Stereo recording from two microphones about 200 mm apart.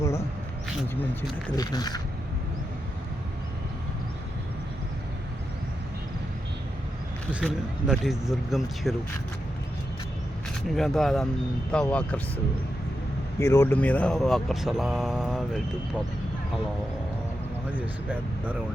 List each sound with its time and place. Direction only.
1.5 s speech: 20° left (ahead or behind)
7.3 s speech: centre (ahead or behind)
10.8 s speech: centre (ahead or behind)
13.4 s speech: 15° left (ahead or behind); by 15.6 s centre (ahead or behind)
17.7 s speech: 10° right (ahead or behind)